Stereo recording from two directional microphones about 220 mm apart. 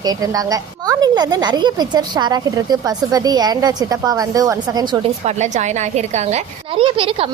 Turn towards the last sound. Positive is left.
turn(degrees=-25)  # may be behind; listen again after turning